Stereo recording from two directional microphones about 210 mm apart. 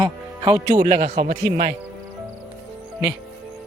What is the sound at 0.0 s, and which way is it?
Speech, 25° right (ahead or behind).